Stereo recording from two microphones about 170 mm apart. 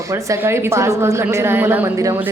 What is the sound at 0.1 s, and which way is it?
Speech, 15° right (ahead or behind).